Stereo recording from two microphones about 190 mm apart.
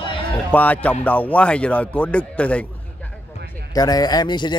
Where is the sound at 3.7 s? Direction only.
20° left (ahead or behind).